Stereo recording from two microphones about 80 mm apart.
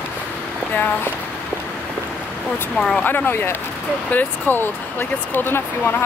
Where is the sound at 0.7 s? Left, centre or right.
Left.